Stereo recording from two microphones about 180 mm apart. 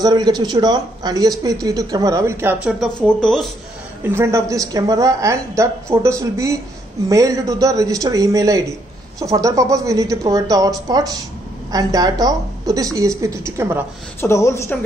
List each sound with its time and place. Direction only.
0.0 s speech: 25° right (ahead or behind)
2.8 s speech: 5° left (ahead or behind)
4.0 s a woman's voice: 15° right (ahead or behind)
14.2 s a woman's voice: 15° left (ahead or behind)